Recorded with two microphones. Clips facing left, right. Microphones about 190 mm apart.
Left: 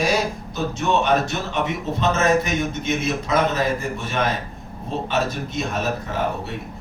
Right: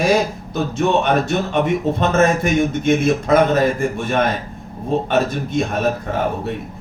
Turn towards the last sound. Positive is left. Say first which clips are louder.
# right 5 dB
turn(degrees=-55)  # may be behind; listen again after turning